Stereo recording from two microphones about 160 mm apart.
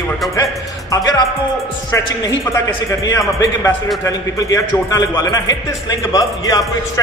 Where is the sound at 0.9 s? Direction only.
25° left (ahead or behind).